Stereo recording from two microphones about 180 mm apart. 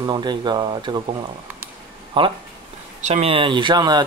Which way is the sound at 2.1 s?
30° right (ahead or behind).